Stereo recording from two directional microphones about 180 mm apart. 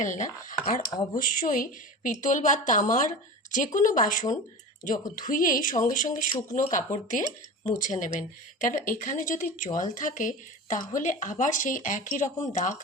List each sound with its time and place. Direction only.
0.0 s a woman's voice: 45° left (ahead or behind)
0.9 s speech: 20° left (ahead or behind)
1.2 s a woman's voice: 50° left (ahead or behind)